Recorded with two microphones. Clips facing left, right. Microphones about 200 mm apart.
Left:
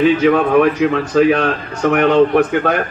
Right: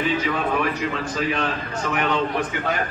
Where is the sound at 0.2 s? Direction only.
60° left (ahead or behind).